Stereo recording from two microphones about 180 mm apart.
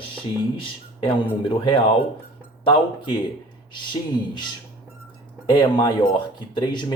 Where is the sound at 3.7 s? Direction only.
25° left (ahead or behind).